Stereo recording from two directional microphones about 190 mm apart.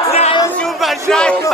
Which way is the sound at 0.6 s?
Centre (ahead or behind).